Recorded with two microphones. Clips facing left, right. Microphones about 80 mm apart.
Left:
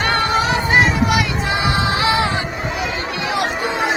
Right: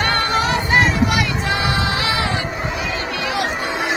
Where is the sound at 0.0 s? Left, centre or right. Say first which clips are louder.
Left 1 dB; centre.